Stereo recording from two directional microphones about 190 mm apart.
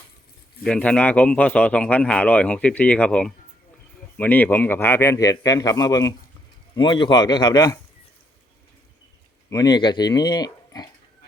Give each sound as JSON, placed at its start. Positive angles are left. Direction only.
{"t": 0.6, "sound": "speech", "side_deg": 5}
{"t": 9.5, "sound": "speech", "side_deg": 20}